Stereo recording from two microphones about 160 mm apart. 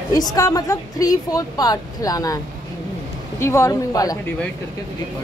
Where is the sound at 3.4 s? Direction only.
20° left (ahead or behind).